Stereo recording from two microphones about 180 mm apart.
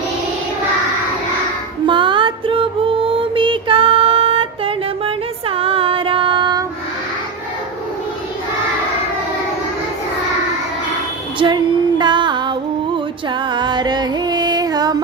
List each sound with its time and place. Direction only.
1.9 s music: 25° right (ahead or behind)
11.3 s female singing: 25° right (ahead or behind)
13.4 s music: 25° right (ahead or behind)